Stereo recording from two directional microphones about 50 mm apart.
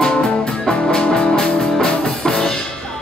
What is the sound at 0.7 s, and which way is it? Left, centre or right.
Music, left.